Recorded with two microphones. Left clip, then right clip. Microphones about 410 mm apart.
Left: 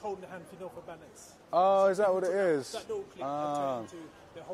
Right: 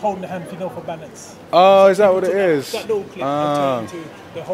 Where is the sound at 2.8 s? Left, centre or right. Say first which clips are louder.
Right 15 dB; left.